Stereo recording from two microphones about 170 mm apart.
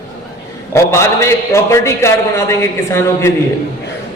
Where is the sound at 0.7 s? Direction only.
15° left (ahead or behind).